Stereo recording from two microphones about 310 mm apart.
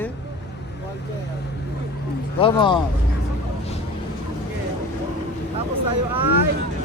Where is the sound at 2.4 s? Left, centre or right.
Centre.